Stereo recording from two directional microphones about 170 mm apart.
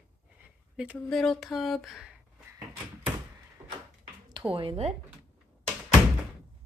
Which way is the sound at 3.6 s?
15° right (ahead or behind).